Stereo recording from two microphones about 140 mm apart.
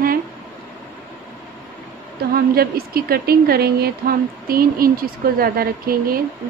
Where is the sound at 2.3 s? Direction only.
90° right.